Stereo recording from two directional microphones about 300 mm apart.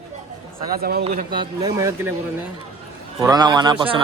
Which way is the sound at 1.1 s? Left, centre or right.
Centre.